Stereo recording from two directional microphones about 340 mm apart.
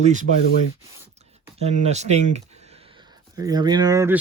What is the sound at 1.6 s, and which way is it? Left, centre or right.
Speech, centre.